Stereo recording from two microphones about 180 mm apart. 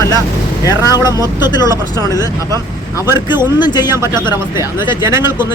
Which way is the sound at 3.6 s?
25° left (ahead or behind).